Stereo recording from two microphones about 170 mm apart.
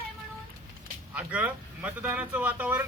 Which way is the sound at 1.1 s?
10° right (ahead or behind).